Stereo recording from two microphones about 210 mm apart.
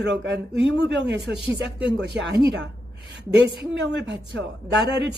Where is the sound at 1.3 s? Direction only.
5° right (ahead or behind).